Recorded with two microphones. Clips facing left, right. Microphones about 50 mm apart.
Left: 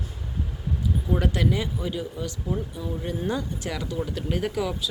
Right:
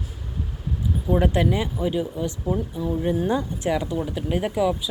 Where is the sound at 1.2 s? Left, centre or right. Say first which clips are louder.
Right 4 dB; right.